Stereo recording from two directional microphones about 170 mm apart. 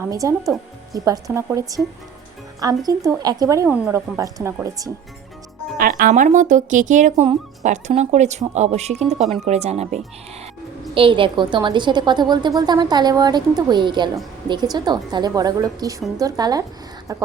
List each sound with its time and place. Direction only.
0.0 s a woman's voice: 20° right (ahead or behind)
5.7 s a woman's voice: 55° right (ahead or behind); by 17.2 s 20° right (ahead or behind)